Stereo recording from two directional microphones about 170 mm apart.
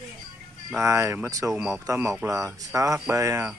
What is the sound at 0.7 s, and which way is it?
Speech, 15° right (ahead or behind).